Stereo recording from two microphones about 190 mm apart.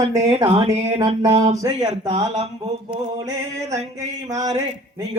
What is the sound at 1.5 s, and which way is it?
Speech, 15° right (ahead or behind).